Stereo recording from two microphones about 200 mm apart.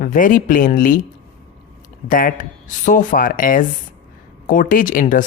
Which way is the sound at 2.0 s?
40° left (ahead or behind).